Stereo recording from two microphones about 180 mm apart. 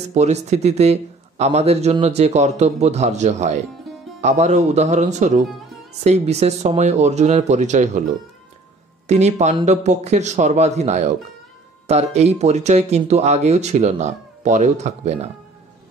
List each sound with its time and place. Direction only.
0.1 s a man's voice: 40° right (ahead or behind)
9.0 s a man's voice: 40° right (ahead or behind)